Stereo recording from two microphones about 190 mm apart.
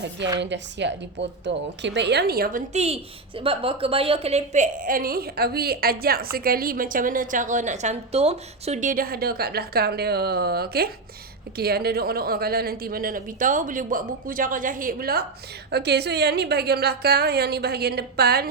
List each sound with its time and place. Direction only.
0.3 s a woman's voice: 65° right (ahead or behind)